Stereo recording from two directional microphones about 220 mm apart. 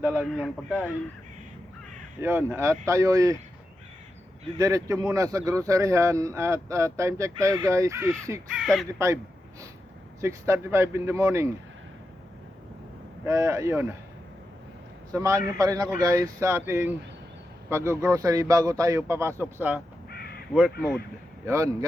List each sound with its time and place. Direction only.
0.0 s speech: 10° right (ahead or behind)
2.2 s speech: 10° right (ahead or behind)
4.5 s speech: 15° right (ahead or behind)
8.5 s speech: centre (ahead or behind)
10.2 s speech: 10° right (ahead or behind)
13.2 s speech: 15° right (ahead or behind)
15.1 s a man's voice: 15° right (ahead or behind)
21.4 s speech: 15° right (ahead or behind)